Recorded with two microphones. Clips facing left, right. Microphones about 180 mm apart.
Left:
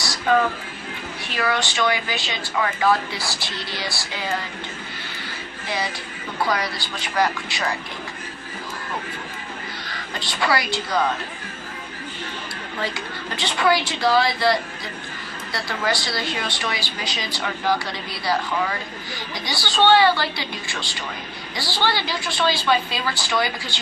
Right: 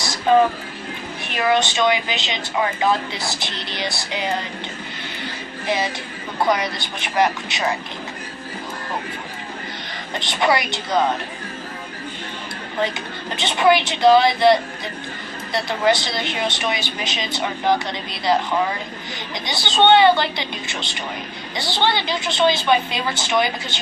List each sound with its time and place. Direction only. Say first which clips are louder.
0.0 s music: right 4 dB; 20° right (ahead or behind)
1.2 s a woman's voice: right 5 dB; 20° right (ahead or behind)
5.6 s a woman's voice: right 5 dB; 20° right (ahead or behind)
9.9 s a woman's voice: right 4 dB; 20° right (ahead or behind)
13.3 s a woman's voice: right 4 dB; 20° right (ahead or behind)
19.5 s a woman's voice: right 2 dB; 20° right (ahead or behind)